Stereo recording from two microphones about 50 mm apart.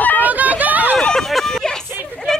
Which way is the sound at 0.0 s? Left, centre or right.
Left.